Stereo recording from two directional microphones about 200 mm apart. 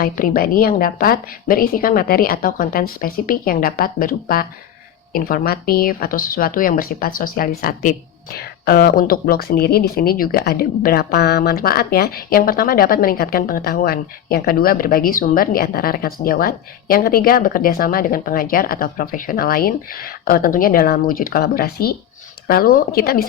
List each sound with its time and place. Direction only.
0.0 s speech: 45° left (ahead or behind)